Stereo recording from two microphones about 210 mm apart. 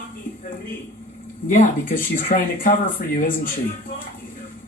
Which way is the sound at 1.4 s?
40° left (ahead or behind).